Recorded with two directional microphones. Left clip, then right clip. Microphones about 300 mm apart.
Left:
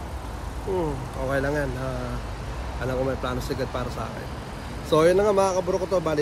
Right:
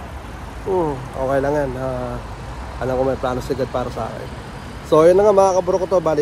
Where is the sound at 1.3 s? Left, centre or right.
Centre.